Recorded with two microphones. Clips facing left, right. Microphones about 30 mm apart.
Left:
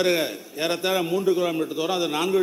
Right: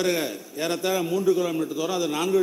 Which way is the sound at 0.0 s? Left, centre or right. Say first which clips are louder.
Left 3 dB; left.